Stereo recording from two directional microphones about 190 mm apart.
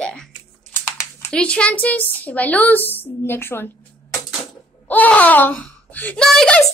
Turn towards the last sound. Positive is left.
turn(degrees=5)  # may be behind; listen again after turning